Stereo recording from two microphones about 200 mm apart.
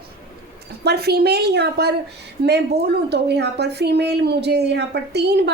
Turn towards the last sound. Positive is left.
turn(degrees=-55)  # may be behind; listen again after turning